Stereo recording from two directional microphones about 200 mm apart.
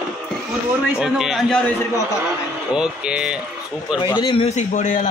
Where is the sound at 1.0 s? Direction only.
Centre (ahead or behind).